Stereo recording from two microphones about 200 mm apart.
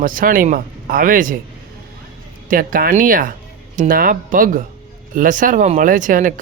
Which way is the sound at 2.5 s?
45° right (ahead or behind).